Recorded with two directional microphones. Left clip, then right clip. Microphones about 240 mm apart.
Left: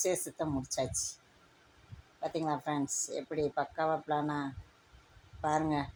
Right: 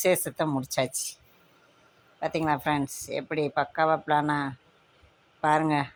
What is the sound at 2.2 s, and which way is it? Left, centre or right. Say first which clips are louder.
Speech: right 8 dB; right.